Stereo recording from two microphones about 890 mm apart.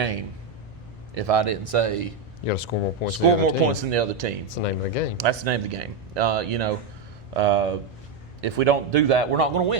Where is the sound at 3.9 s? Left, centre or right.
Right.